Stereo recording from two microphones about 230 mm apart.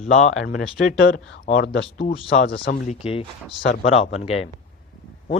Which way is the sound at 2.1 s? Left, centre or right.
Left.